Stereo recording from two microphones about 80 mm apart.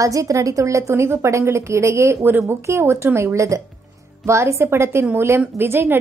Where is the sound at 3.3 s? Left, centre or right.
Right.